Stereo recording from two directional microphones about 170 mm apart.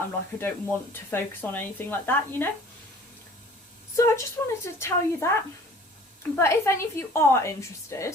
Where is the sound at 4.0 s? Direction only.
15° left (ahead or behind).